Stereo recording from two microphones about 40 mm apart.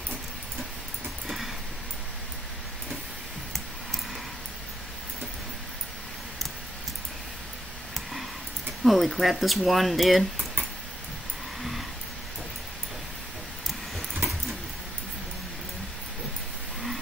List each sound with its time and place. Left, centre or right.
8.8 s speech: centre